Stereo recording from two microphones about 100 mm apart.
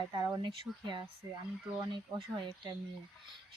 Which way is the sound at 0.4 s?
50° right (ahead or behind).